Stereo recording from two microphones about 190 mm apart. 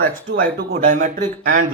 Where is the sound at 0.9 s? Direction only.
45° right (ahead or behind).